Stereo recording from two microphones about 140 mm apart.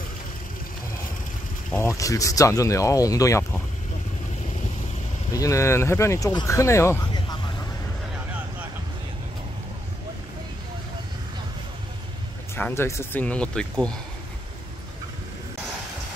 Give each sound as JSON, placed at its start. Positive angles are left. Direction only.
{"t": 1.8, "sound": "speech", "side_deg": 20}
{"t": 5.3, "sound": "speech", "side_deg": 25}
{"t": 12.5, "sound": "speech", "side_deg": 15}